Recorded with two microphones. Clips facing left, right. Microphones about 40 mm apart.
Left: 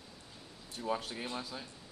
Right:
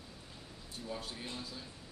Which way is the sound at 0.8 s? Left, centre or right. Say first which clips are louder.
Left 7 dB; left.